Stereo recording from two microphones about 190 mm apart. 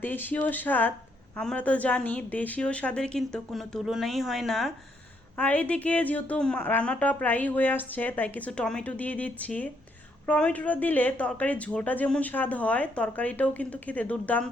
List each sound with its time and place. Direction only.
0.0 s a woman's voice: 10° left (ahead or behind)